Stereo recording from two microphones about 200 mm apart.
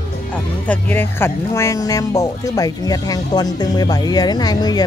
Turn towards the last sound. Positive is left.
turn(degrees=20)  # may be behind; listen again after turning